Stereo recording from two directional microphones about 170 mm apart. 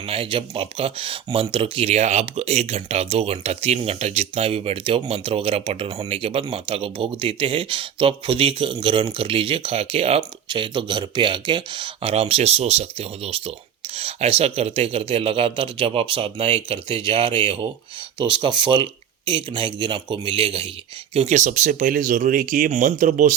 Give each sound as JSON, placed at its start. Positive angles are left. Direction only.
{"t": 0.1, "sound": "speech", "side_deg": -35}